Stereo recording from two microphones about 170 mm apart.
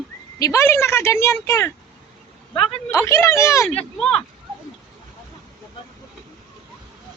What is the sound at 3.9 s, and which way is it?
Speech, centre (ahead or behind).